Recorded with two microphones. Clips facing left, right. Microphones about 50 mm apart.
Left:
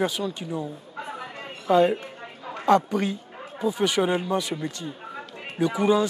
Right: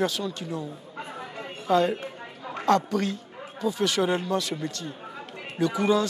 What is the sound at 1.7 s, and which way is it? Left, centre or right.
Speech, centre.